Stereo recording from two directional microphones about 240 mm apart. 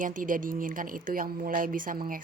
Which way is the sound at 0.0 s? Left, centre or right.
Right.